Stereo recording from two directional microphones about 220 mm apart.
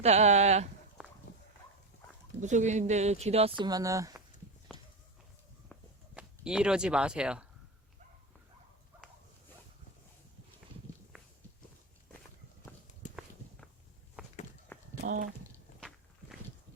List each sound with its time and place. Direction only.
0.0 s speech: 30° right (ahead or behind)
1.3 s walk: 50° left (ahead or behind)
2.4 s speech: 35° right (ahead or behind)
3.6 s speech: 15° right (ahead or behind)
5.7 s walk: 5° left (ahead or behind)
6.1 s speech: 5° right (ahead or behind)
14.7 s walk: 10° left (ahead or behind)
15.0 s speech: 40° right (ahead or behind)